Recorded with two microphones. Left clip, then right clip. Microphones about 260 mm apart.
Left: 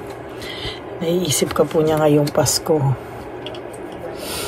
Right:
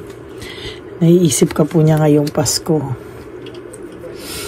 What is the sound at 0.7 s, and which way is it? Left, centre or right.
Speech, right.